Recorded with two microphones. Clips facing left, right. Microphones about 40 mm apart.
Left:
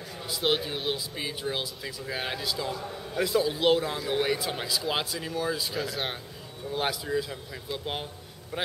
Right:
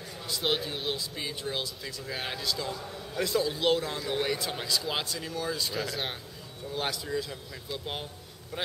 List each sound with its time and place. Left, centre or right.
0.3 s speech: centre
6.7 s speech: centre